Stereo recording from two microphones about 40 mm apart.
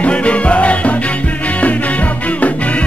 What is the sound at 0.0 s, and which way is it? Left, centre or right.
Music, left.